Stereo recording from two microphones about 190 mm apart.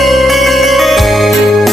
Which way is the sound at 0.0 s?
Centre (ahead or behind).